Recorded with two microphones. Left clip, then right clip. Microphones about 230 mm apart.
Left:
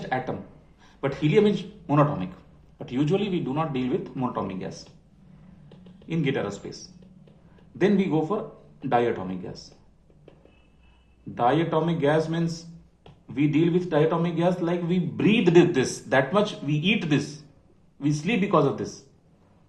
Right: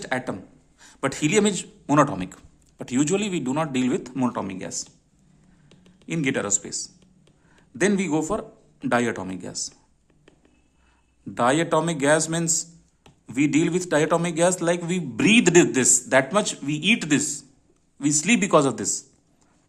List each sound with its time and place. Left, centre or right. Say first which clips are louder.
0.8 s speech: right 2 dB; right
6.1 s speech: right 3 dB; right
7.8 s speech: even; right
11.3 s a man's voice: right 2 dB; right